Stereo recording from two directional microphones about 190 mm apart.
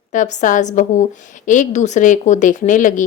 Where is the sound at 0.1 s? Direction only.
40° left (ahead or behind).